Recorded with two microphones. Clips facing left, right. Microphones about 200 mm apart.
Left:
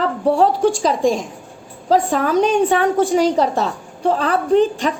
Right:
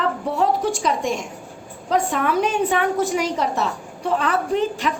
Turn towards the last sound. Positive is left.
turn(degrees=35)  # may be behind; listen again after turning